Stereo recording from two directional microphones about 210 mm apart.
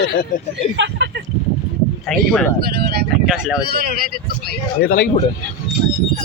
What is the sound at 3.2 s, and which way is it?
Speech, 5° right (ahead or behind).